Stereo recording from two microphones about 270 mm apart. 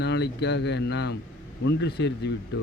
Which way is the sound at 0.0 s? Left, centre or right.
Left.